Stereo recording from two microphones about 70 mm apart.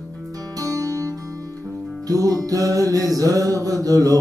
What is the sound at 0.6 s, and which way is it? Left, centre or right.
Music, right.